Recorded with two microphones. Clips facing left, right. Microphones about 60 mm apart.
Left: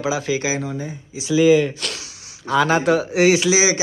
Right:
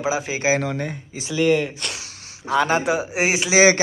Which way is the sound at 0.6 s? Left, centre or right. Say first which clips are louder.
Right 2 dB; right.